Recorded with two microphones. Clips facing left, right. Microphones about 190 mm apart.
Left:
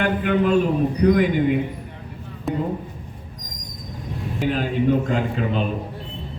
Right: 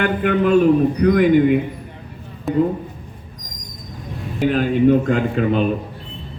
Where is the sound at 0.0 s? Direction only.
55° right (ahead or behind).